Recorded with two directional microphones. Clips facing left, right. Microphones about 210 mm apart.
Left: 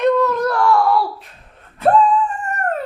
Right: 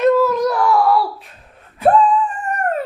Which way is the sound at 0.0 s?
5° right (ahead or behind).